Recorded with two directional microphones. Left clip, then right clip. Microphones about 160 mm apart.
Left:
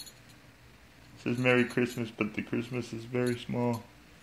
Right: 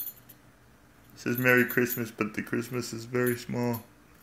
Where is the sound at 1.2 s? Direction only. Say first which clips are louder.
Right 3 dB; 10° right (ahead or behind).